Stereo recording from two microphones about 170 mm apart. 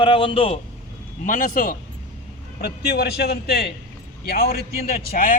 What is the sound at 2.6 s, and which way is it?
A man's voice, 70° left (ahead or behind).